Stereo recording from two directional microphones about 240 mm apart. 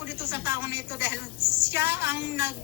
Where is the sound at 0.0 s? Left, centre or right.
Centre.